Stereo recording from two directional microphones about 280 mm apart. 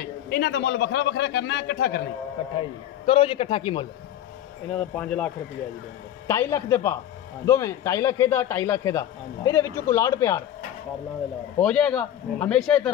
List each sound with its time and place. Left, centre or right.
0.3 s a man's voice: left
2.6 s a man's voice: centre
4.7 s a man's voice: centre
11.6 s speech: centre